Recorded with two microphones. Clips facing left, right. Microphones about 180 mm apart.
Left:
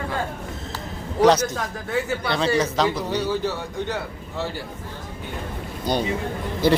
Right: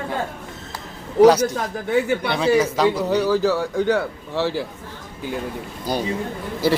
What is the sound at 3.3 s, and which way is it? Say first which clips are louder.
Speech: right 7 dB; 90° right.